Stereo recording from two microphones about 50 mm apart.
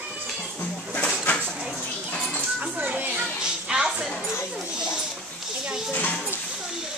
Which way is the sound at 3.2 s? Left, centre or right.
Centre.